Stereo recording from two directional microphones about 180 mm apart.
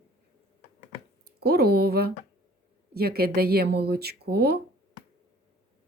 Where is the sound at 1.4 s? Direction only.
60° right (ahead or behind).